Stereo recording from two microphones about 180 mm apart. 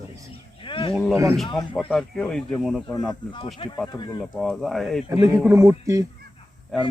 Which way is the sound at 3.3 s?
25° left (ahead or behind).